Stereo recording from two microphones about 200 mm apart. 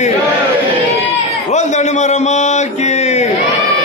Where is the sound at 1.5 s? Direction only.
35° left (ahead or behind).